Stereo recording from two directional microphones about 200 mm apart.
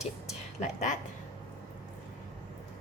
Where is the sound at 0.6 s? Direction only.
40° left (ahead or behind).